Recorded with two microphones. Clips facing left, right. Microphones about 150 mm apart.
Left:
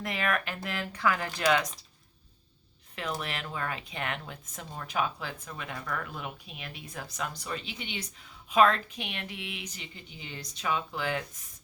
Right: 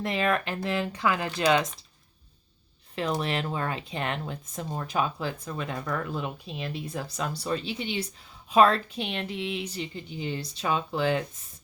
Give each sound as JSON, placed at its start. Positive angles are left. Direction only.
{"t": 0.0, "sound": "speech", "side_deg": -30}
{"t": 2.9, "sound": "speech", "side_deg": -30}